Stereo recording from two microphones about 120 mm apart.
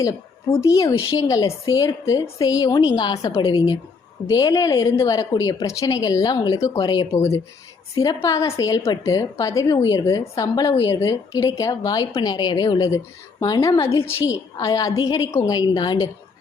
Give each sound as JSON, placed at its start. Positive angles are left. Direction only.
{"t": 0.5, "sound": "a woman's voice", "side_deg": 25}